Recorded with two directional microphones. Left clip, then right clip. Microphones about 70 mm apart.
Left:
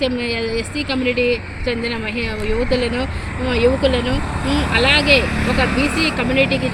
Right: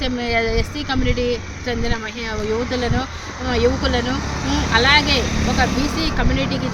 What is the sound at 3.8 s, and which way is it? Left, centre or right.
Speech, right.